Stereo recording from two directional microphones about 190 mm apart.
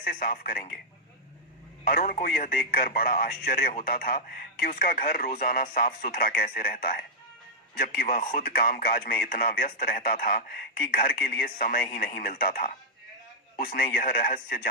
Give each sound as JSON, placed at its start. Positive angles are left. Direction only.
{"t": 0.0, "sound": "a man's voice", "side_deg": 50}
{"t": 1.8, "sound": "a man's voice", "side_deg": 50}